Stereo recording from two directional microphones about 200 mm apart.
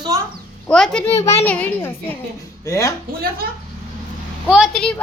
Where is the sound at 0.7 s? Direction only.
5° left (ahead or behind).